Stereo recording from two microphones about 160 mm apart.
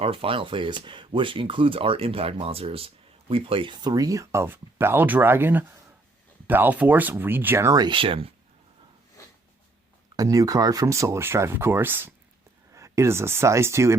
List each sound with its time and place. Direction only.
0.0 s speech: 35° right (ahead or behind)
10.2 s speech: 20° right (ahead or behind)